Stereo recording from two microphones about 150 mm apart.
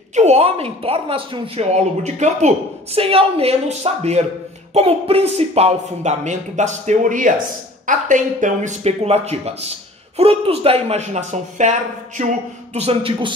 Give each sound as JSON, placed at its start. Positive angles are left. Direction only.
{"t": 0.1, "sound": "speech", "side_deg": -50}
{"t": 12.7, "sound": "a man's voice", "side_deg": -40}